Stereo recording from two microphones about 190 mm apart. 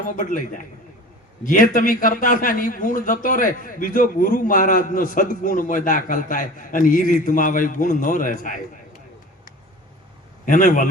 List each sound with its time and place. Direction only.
0.0 s a man's voice: 45° left (ahead or behind)
10.4 s a man's voice: 45° left (ahead or behind)